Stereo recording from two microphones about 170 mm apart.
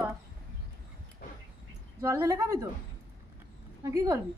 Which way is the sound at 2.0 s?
15° right (ahead or behind).